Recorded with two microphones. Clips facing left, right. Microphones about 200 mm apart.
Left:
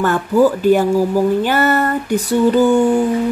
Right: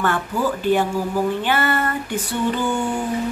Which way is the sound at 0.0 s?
40° left (ahead or behind).